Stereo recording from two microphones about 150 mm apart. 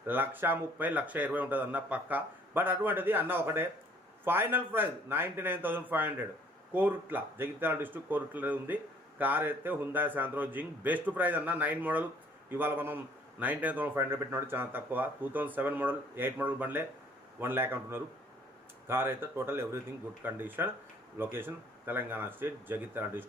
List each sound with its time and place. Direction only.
0.1 s speech: 15° right (ahead or behind)